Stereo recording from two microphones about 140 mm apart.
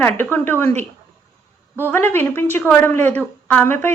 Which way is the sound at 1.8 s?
15° left (ahead or behind).